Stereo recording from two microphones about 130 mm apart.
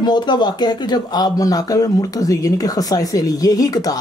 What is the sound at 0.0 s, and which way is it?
Speech, 35° left (ahead or behind).